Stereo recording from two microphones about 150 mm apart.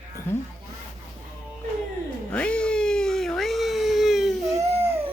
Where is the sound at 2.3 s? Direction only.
5° left (ahead or behind).